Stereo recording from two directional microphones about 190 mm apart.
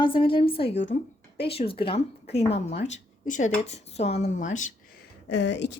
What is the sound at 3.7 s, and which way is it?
Speech, 35° left (ahead or behind).